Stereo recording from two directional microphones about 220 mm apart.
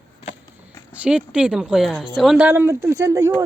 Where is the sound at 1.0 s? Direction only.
5° right (ahead or behind).